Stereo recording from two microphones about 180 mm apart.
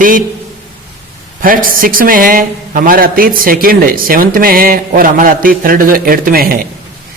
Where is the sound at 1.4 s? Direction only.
50° right (ahead or behind).